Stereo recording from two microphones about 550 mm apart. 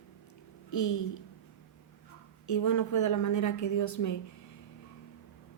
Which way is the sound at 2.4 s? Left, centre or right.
Left.